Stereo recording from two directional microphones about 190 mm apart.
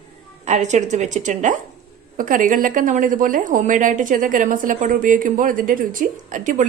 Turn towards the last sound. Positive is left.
turn(degrees=-40)  # may be behind; listen again after turning